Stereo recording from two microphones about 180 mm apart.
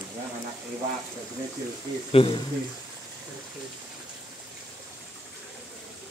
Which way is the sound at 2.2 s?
30° left (ahead or behind).